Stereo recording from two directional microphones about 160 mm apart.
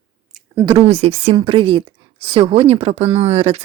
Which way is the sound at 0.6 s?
35° right (ahead or behind).